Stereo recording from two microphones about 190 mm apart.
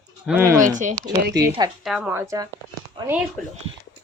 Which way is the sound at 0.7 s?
40° right (ahead or behind).